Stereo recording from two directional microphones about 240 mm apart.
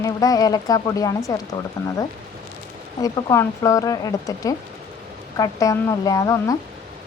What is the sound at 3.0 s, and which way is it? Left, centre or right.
Speech, centre.